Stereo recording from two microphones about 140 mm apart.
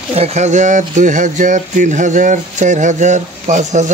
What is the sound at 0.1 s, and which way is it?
Speech, 50° right (ahead or behind).